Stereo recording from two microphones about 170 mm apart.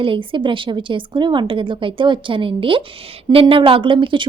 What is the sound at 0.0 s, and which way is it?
A woman's voice, 30° right (ahead or behind).